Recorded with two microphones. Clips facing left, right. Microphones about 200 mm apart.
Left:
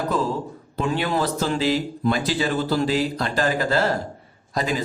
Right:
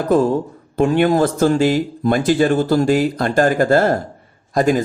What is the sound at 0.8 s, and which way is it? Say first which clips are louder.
Speech: right 9 dB; 50° right (ahead or behind).